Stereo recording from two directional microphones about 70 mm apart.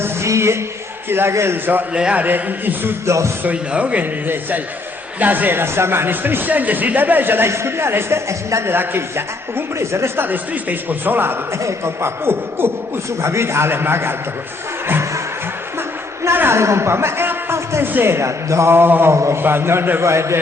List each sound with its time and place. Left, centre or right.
0.0 s a sound: right
1.1 s a man's voice: right
1.9 s a man's voice: centre
2.2 s speech: right
3.1 s a man's voice: right
3.4 s a man's voice: centre; by 8.7 s right
8.7 s a man's voice: right
10.2 s a man's voice: right
16.2 s a man's voice: right